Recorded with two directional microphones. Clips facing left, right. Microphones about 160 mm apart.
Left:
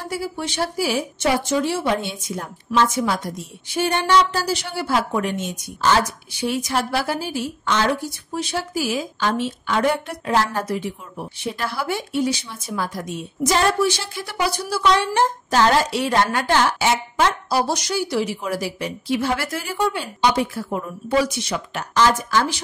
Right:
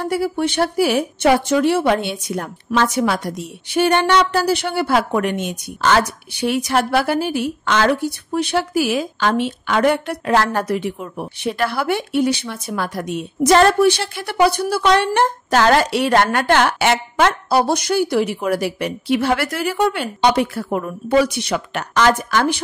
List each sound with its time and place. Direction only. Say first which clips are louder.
0.0 s a woman's voice: right 8 dB; 60° right (ahead or behind)